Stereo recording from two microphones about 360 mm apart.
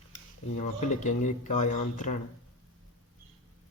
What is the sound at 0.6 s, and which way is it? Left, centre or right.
Speech, centre.